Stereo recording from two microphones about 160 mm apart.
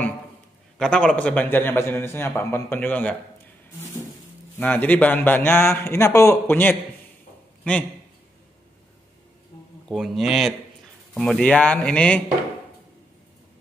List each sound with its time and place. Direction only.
0.7 s a man's voice: 5° left (ahead or behind)
4.6 s a man's voice: 10° left (ahead or behind)
9.8 s a man's voice: centre (ahead or behind)